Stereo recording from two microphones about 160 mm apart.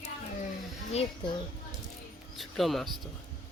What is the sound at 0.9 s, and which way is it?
Speech, 30° left (ahead or behind).